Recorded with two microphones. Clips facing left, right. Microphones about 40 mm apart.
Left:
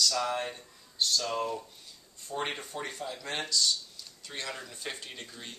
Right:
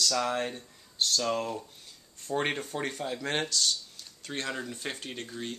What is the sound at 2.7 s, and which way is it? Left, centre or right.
Speech, right.